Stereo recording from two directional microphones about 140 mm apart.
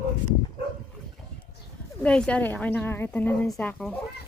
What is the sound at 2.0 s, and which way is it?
A woman's voice, 10° left (ahead or behind).